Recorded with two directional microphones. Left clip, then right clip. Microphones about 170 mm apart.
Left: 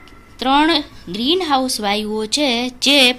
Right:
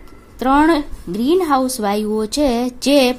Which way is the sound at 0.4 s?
50° right (ahead or behind).